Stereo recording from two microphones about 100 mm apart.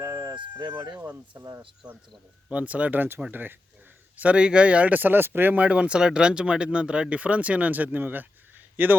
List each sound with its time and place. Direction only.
0.9 s speech: 20° right (ahead or behind)
1.8 s speech: 10° right (ahead or behind)